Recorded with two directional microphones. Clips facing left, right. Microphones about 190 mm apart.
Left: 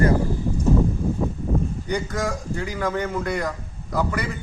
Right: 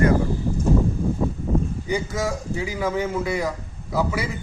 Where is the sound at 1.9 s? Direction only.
5° right (ahead or behind).